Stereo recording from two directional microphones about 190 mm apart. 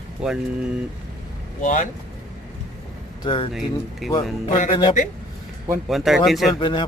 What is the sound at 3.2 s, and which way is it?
Speech, 25° left (ahead or behind).